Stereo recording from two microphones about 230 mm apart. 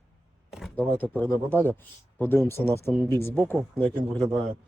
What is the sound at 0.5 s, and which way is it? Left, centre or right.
Speech, centre.